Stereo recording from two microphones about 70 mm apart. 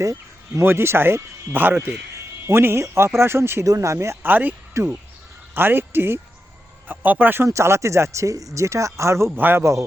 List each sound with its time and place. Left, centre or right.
0.0 s a sound: right
0.6 s speech: right
3.7 s speech: right
4.3 s speech: right
4.7 s speech: right
7.4 s speech: right
9.4 s speech: right